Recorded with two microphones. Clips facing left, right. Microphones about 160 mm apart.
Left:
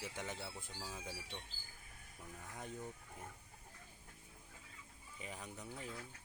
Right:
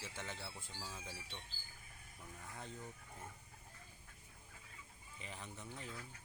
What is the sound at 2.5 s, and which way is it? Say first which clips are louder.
Speech: left 3 dB; 15° left (ahead or behind).